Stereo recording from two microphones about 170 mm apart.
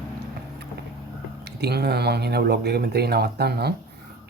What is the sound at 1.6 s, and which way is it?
Speech, 75° right (ahead or behind).